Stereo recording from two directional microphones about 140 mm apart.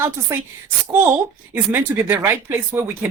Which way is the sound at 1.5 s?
15° right (ahead or behind).